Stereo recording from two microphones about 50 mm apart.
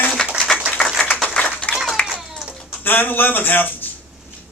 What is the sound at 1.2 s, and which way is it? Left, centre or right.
Clapping, left.